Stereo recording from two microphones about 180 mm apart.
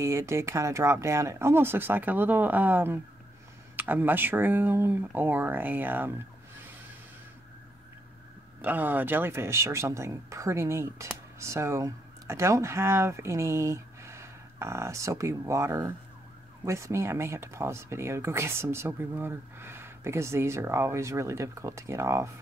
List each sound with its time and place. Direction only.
0.0 s speech: 15° right (ahead or behind)
8.5 s speech: 10° right (ahead or behind)